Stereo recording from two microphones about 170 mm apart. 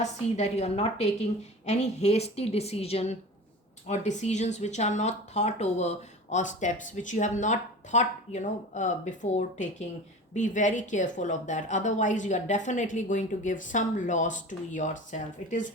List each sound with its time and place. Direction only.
0.0 s a woman's voice: 40° left (ahead or behind)